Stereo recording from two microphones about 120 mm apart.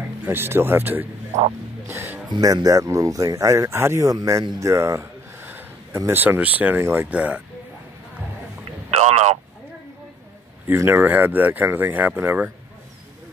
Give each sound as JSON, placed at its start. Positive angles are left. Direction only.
{"t": 0.2, "sound": "speech", "side_deg": -20}
{"t": 2.2, "sound": "speech", "side_deg": -35}
{"t": 8.9, "sound": "a sound", "side_deg": -70}
{"t": 10.7, "sound": "speech", "side_deg": -15}